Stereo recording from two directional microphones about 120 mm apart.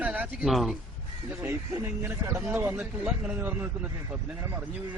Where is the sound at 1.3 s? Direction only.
15° right (ahead or behind).